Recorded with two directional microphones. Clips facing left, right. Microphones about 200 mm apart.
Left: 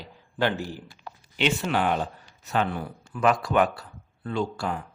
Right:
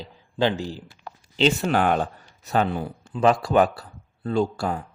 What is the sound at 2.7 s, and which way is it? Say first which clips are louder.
A man's voice: right 4 dB; 25° right (ahead or behind).